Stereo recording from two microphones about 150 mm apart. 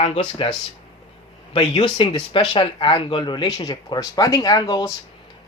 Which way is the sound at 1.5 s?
35° left (ahead or behind).